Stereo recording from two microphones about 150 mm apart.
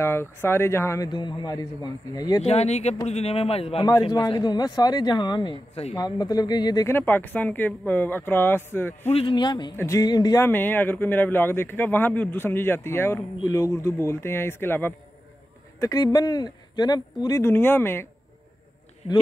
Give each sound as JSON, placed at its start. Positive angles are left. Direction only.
{"t": 0.0, "sound": "a man's voice", "side_deg": 15}
{"t": 1.0, "sound": "speech", "side_deg": 30}
{"t": 2.4, "sound": "a man's voice", "side_deg": 45}
{"t": 6.9, "sound": "a man's voice", "side_deg": 15}
{"t": 9.0, "sound": "a man's voice", "side_deg": 40}
{"t": 10.4, "sound": "a man's voice", "side_deg": 15}
{"t": 15.8, "sound": "speech", "side_deg": 25}